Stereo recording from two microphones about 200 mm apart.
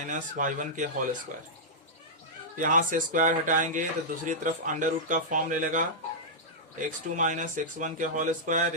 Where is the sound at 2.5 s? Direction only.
40° right (ahead or behind).